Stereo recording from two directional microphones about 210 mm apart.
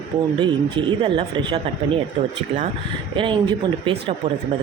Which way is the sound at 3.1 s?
25° right (ahead or behind).